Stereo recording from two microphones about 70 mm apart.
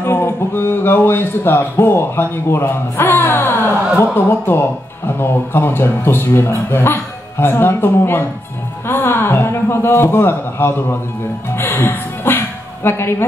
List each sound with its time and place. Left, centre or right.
0.0 s speech: left
11.5 s music: left